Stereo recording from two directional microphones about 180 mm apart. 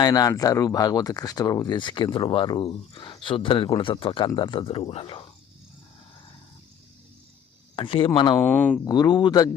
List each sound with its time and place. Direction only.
0.0 s speech: 20° left (ahead or behind)
7.8 s speech: 30° left (ahead or behind)
8.4 s speech: 10° left (ahead or behind)
8.8 s speech: 20° left (ahead or behind)